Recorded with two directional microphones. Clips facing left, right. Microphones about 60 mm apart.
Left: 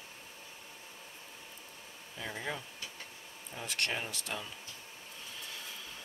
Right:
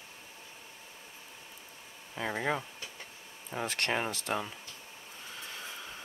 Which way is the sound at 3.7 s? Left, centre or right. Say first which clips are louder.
Right 3 dB; right.